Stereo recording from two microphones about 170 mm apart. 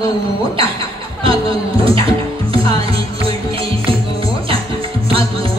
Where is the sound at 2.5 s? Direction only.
35° right (ahead or behind).